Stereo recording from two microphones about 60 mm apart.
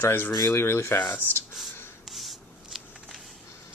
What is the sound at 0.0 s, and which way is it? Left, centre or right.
Speech, left.